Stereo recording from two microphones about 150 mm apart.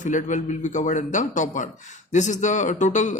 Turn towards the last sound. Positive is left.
turn(degrees=55)  # may be behind; listen again after turning